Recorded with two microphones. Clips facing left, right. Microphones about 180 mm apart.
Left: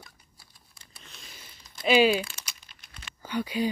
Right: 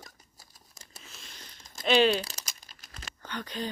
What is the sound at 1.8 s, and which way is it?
Speech, 5° left (ahead or behind).